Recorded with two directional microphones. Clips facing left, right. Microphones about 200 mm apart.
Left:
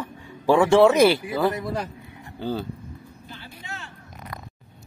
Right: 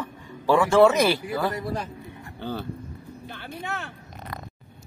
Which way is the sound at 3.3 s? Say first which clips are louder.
Right 6 dB; 60° right (ahead or behind).